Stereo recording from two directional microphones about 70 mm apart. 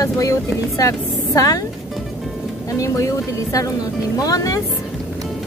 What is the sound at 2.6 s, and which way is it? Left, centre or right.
Speech, left.